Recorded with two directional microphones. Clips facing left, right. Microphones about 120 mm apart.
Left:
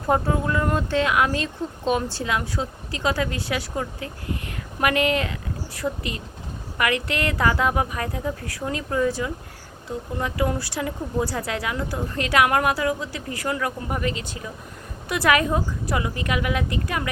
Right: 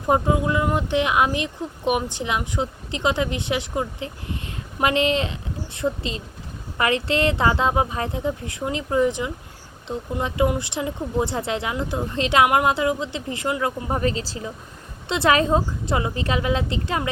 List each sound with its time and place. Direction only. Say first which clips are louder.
0.1 s speech: right 2 dB; 15° right (ahead or behind)